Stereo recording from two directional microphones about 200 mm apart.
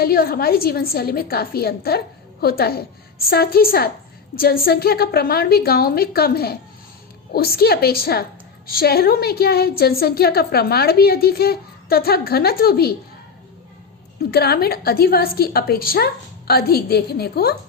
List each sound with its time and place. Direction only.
0.0 s a woman's voice: 50° left (ahead or behind)
14.2 s a woman's voice: 55° left (ahead or behind)